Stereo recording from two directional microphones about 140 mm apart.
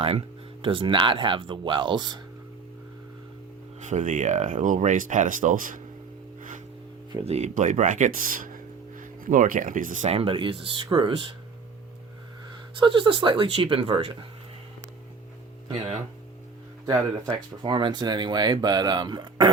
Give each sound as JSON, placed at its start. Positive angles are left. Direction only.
{"t": 0.0, "sound": "speech", "side_deg": -45}
{"t": 3.8, "sound": "speech", "side_deg": -60}
{"t": 7.3, "sound": "speech", "side_deg": -55}
{"t": 12.7, "sound": "speech", "side_deg": -35}
{"t": 16.8, "sound": "speech", "side_deg": -30}